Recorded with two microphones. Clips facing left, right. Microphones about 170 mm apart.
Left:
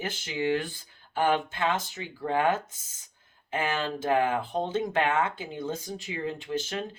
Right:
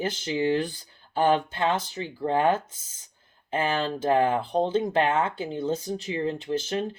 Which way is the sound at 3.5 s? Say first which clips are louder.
Right 3 dB; 30° right (ahead or behind).